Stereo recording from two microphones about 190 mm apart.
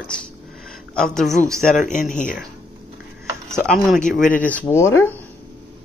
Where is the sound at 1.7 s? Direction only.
40° left (ahead or behind).